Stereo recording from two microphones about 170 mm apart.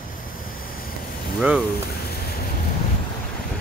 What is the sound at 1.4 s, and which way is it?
Speech, 5° right (ahead or behind).